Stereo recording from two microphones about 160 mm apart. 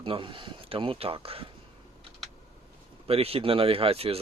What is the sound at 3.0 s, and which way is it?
Speech, 35° right (ahead or behind).